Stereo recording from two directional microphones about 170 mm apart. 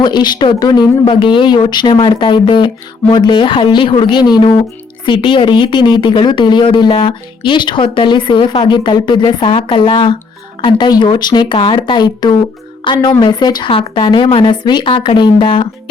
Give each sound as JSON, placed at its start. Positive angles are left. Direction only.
{"t": 0.0, "sound": "a woman's voice", "side_deg": 25}